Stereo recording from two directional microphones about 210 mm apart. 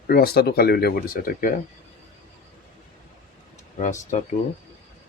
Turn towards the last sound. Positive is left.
turn(degrees=35)  # may be behind; listen again after turning